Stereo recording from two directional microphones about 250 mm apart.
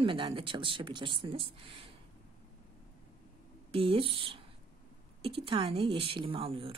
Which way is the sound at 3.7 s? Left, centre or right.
Right.